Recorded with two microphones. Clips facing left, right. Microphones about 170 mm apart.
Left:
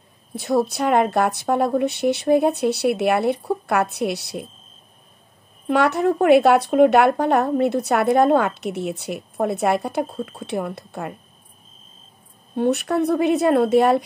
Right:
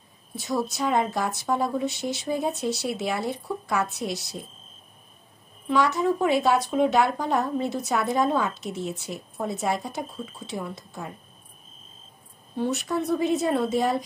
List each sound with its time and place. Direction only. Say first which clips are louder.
0.4 s speech: left 7 dB; 60° left (ahead or behind)
5.7 s speech: left 4 dB; 60° left (ahead or behind)
12.5 s speech: left 7 dB; 60° left (ahead or behind)